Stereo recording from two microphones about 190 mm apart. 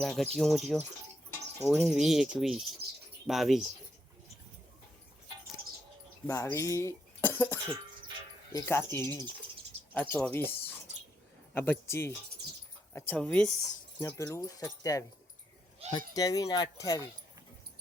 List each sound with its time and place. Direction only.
0.0 s speech: centre (ahead or behind)
6.2 s speech: 15° left (ahead or behind)